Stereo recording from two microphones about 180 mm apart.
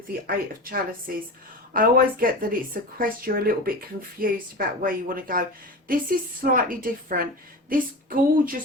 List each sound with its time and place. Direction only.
0.3 s speech: 55° right (ahead or behind)